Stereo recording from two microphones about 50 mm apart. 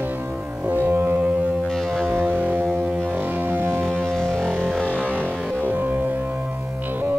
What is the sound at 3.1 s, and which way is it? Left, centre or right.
Music, right.